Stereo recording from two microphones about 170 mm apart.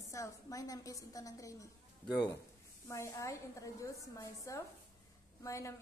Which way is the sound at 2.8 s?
15° left (ahead or behind).